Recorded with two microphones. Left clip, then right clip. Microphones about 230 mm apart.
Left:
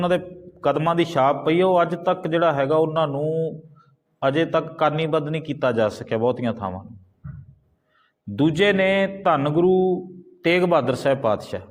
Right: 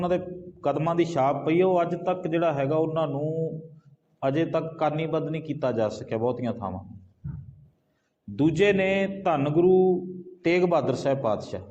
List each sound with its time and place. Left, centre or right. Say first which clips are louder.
0.6 s a man's voice: left 5 dB; left
8.4 s a man's voice: left 3 dB; left